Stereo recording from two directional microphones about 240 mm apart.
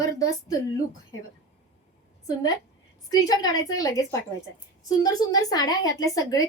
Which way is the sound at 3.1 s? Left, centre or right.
Centre.